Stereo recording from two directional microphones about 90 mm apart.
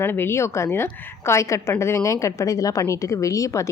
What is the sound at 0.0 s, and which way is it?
Speech, 25° left (ahead or behind).